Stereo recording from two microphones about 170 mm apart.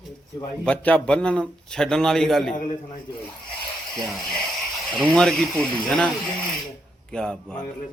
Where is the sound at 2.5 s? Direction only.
45° left (ahead or behind).